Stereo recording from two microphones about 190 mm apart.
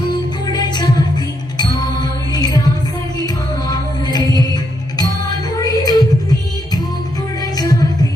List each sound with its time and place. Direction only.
0.1 s music: 20° left (ahead or behind)
7.5 s music: 20° left (ahead or behind)